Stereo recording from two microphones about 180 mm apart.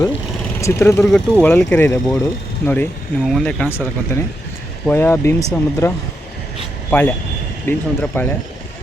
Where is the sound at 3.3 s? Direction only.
5° left (ahead or behind).